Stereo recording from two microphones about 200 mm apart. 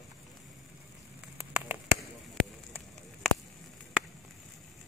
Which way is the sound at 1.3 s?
10° right (ahead or behind).